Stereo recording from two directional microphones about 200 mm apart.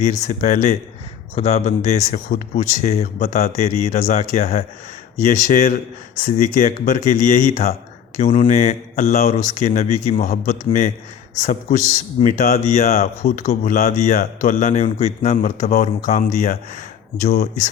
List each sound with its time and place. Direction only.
0.0 s speech: 40° left (ahead or behind)
12.2 s speech: 40° left (ahead or behind)